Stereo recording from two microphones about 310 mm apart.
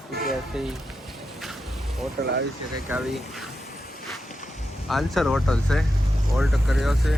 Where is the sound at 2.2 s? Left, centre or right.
Right.